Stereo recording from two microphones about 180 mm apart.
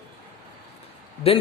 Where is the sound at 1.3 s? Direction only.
35° left (ahead or behind).